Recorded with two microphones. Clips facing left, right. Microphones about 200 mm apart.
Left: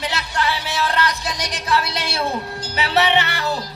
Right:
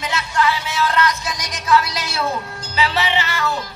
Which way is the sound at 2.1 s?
35° left (ahead or behind).